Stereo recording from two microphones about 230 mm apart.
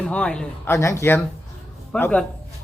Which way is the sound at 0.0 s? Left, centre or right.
Centre.